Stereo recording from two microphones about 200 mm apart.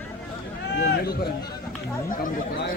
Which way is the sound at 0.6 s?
55° left (ahead or behind).